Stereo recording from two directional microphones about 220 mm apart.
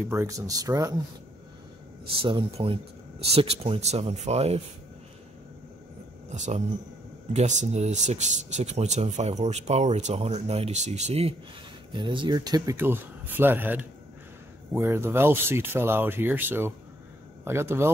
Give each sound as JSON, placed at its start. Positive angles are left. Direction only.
{"t": 0.0, "sound": "speech", "side_deg": -10}
{"t": 2.1, "sound": "speech", "side_deg": -25}
{"t": 6.3, "sound": "speech", "side_deg": -35}